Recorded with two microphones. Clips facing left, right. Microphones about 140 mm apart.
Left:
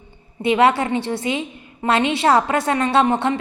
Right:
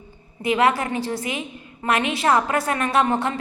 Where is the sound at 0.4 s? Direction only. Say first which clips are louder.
Left 4 dB; 25° left (ahead or behind).